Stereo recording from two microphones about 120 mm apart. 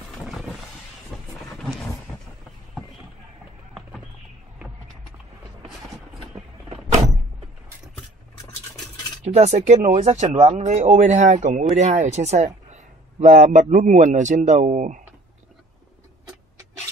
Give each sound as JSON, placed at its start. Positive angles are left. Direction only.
{"t": 9.2, "sound": "speech", "side_deg": -70}
{"t": 11.0, "sound": "a man's voice", "side_deg": -90}
{"t": 11.7, "sound": "a man's voice", "side_deg": -70}